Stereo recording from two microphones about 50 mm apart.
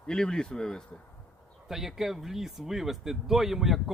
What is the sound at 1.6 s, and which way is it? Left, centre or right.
Speech, centre.